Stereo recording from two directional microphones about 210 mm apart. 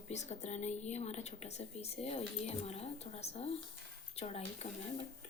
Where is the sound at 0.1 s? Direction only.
35° left (ahead or behind).